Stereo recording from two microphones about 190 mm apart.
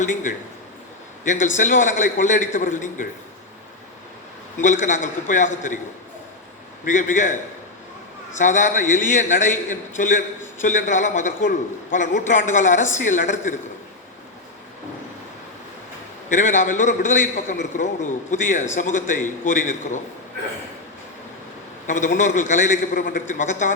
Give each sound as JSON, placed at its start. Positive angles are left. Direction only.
{"t": 0.0, "sound": "a man's voice", "side_deg": 45}
{"t": 4.5, "sound": "a man's voice", "side_deg": 40}
{"t": 6.8, "sound": "a man's voice", "side_deg": 40}
{"t": 8.4, "sound": "a man's voice", "side_deg": 40}
{"t": 16.3, "sound": "a man's voice", "side_deg": 40}
{"t": 21.8, "sound": "a man's voice", "side_deg": 40}